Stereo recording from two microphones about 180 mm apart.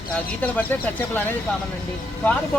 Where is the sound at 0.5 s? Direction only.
10° left (ahead or behind).